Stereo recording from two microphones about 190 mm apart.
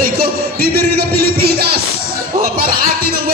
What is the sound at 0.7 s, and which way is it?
Music, 55° right (ahead or behind).